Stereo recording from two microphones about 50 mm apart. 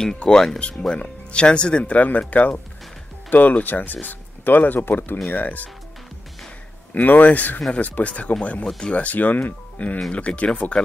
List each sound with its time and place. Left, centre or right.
0.0 s speech: centre
2.0 s speech: left
6.9 s speech: left
8.6 s speech: centre
8.9 s speech: left